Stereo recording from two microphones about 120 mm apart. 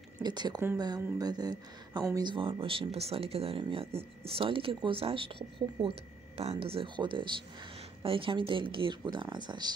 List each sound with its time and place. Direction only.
0.2 s speech: 35° right (ahead or behind)
2.2 s speech: 45° right (ahead or behind)